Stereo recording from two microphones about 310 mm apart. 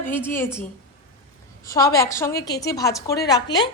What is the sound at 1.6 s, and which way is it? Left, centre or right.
A woman's voice, centre.